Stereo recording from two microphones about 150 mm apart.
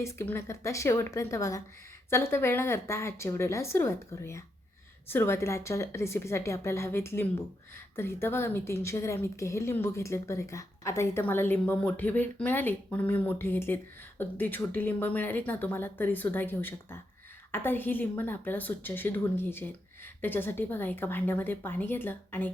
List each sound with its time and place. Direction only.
0.0 s a woman's voice: 15° left (ahead or behind)